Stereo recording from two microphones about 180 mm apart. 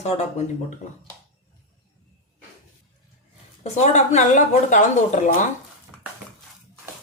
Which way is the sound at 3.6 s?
40° left (ahead or behind).